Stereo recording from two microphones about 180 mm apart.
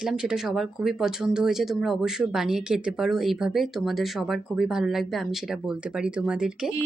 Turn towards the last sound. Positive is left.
turn(degrees=-5)  # may be behind; listen again after turning